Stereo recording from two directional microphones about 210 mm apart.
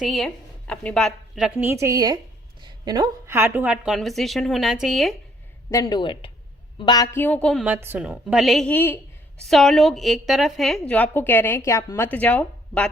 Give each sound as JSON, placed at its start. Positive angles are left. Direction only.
{"t": 0.0, "sound": "a woman's voice", "side_deg": 0}
{"t": 5.7, "sound": "a woman's voice", "side_deg": 20}